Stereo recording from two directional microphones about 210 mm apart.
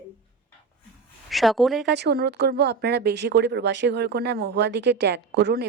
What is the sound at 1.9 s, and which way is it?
Speech, 55° right (ahead or behind).